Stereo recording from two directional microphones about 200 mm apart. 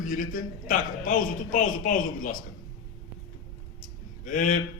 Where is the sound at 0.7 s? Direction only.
45° left (ahead or behind).